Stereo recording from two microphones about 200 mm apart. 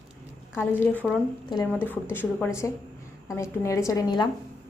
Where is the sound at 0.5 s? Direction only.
10° left (ahead or behind).